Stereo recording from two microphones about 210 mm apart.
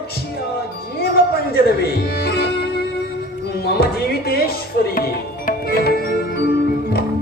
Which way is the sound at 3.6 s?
45° left (ahead or behind).